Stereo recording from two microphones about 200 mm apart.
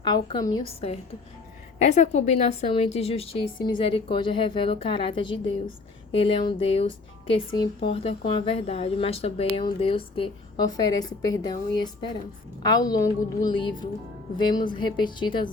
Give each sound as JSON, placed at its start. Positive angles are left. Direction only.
{"t": 0.0, "sound": "speech", "side_deg": 20}